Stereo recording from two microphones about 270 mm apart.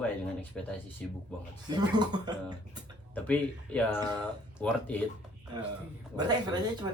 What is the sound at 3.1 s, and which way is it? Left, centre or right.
Speech, centre.